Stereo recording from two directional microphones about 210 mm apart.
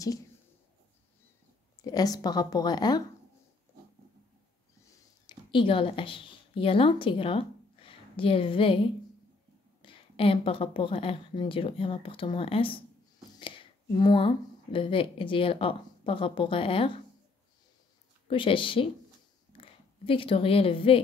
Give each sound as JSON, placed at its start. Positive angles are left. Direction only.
{"t": 1.8, "sound": "speech", "side_deg": 20}
{"t": 5.2, "sound": "speech", "side_deg": 25}
{"t": 18.3, "sound": "speech", "side_deg": 25}